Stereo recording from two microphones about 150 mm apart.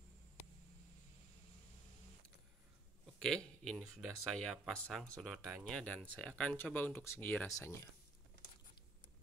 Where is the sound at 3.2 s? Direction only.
5° left (ahead or behind); by 7.8 s 20° left (ahead or behind).